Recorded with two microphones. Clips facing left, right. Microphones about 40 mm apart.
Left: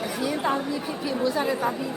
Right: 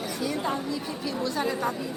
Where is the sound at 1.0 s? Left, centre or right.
Centre.